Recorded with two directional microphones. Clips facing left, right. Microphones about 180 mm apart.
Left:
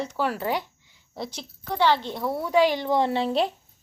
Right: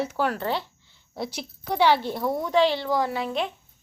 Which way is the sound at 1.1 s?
5° right (ahead or behind).